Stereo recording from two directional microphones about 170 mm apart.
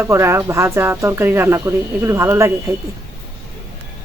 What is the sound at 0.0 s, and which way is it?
Speech, 15° right (ahead or behind).